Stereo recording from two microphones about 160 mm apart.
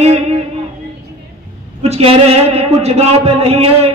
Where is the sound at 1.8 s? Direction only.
40° right (ahead or behind).